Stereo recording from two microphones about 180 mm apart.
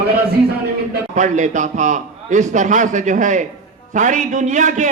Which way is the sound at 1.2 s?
45° right (ahead or behind).